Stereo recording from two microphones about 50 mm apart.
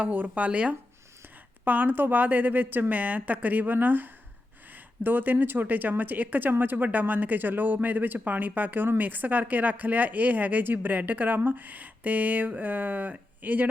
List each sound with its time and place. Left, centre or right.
0.0 s speech: right
1.6 s speech: right